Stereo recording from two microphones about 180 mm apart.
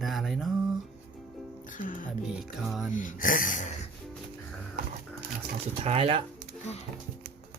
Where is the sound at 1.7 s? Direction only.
45° left (ahead or behind).